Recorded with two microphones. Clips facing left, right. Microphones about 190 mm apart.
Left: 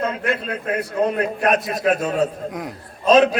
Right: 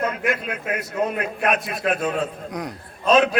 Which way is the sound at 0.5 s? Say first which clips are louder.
Left 4 dB; 30° left (ahead or behind).